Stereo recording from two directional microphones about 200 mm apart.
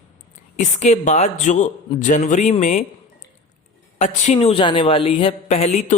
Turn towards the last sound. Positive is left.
turn(degrees=35)  # may be behind; listen again after turning